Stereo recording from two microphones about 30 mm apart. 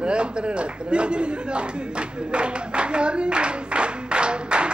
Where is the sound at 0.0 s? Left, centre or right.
Right.